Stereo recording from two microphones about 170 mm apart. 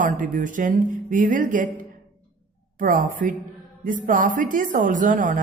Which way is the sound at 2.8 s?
50° right (ahead or behind).